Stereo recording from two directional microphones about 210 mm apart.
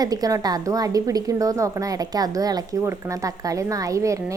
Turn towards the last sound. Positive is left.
turn(degrees=-15)  # may be behind; listen again after turning